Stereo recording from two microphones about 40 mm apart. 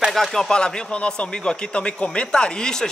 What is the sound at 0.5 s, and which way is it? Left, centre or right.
A man's voice, left.